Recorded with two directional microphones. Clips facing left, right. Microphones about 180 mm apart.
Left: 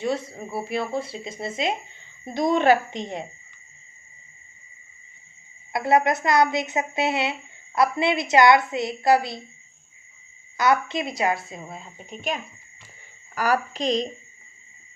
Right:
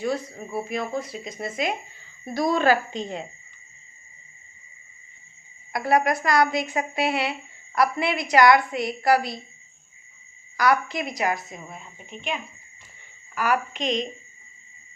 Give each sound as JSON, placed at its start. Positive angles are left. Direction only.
{"t": 0.0, "sound": "a woman's voice", "side_deg": 25}
{"t": 5.7, "sound": "a woman's voice", "side_deg": 25}
{"t": 10.6, "sound": "a woman's voice", "side_deg": 25}